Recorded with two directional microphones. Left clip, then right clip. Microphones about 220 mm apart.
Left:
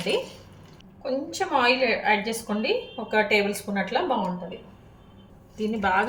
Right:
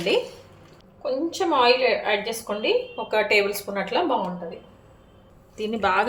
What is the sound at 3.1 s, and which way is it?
Speech, 30° right (ahead or behind).